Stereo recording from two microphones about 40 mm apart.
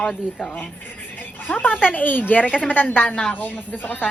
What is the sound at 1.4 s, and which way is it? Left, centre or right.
A woman's voice, left.